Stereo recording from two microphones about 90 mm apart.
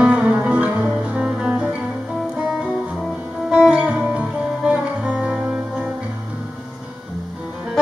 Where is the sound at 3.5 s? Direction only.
10° right (ahead or behind).